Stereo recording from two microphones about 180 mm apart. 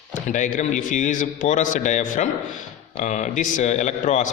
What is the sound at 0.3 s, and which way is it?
A man's voice, 45° left (ahead or behind).